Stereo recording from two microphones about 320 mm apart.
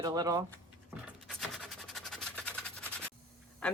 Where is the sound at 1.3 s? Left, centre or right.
Centre.